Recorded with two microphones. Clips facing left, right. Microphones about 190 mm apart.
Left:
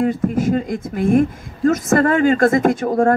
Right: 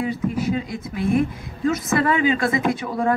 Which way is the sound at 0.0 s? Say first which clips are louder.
Left 6 dB; 50° left (ahead or behind).